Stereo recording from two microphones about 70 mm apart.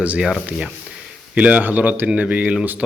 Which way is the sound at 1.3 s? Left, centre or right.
Centre.